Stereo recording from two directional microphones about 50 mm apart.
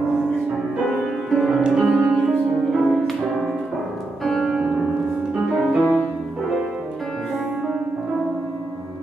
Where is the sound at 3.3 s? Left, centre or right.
Centre.